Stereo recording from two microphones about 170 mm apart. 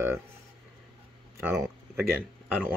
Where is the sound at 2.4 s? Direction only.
10° right (ahead or behind).